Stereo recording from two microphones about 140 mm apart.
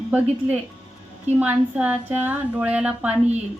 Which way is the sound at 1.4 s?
10° right (ahead or behind).